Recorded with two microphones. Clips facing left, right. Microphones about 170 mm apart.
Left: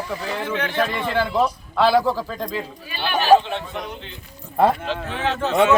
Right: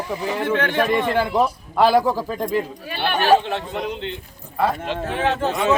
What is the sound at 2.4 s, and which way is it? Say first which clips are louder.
Speech: right 5 dB; 55° right (ahead or behind).